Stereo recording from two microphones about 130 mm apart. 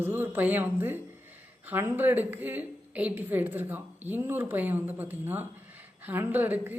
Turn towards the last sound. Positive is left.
turn(degrees=-15)  # may be behind; listen again after turning